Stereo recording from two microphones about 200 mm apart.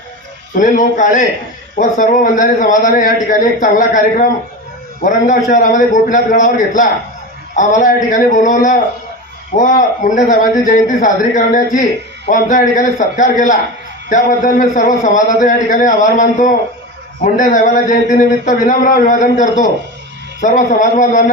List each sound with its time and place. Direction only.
0.5 s a man's voice: 40° left (ahead or behind)